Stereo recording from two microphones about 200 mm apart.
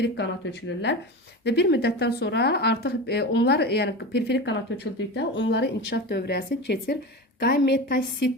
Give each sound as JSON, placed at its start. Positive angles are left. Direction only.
{"t": 1.5, "sound": "speech", "side_deg": 55}